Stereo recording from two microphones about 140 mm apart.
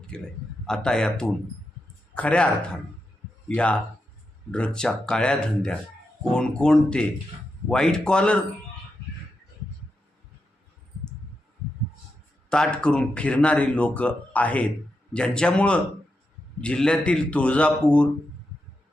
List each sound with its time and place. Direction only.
0.1 s speech: 5° left (ahead or behind)
12.5 s speech: 5° left (ahead or behind)